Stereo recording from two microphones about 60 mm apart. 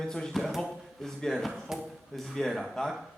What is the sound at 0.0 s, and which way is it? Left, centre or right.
Speech, centre.